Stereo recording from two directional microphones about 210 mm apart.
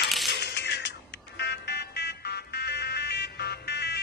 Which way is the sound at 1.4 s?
50° left (ahead or behind).